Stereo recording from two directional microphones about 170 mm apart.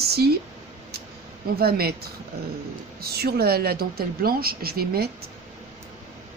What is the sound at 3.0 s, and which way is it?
A woman's voice, 65° right (ahead or behind).